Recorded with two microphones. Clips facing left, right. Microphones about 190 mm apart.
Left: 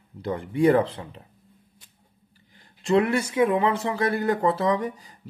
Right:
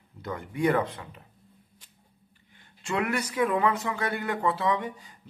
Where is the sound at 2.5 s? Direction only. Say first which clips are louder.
Left 10 dB; 35° left (ahead or behind).